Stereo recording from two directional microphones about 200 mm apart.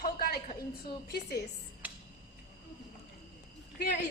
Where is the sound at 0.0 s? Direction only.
50° left (ahead or behind).